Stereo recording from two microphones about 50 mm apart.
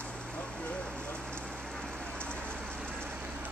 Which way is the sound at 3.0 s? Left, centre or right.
Right.